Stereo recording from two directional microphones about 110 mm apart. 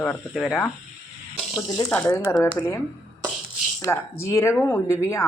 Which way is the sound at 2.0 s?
35° left (ahead or behind).